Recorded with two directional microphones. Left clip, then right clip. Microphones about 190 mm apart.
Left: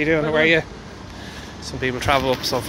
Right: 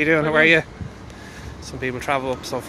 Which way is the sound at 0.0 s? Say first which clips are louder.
Right 1 dB; 20° right (ahead or behind).